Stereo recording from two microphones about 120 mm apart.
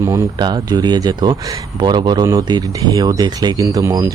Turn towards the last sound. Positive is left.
turn(degrees=-25)  # may be behind; listen again after turning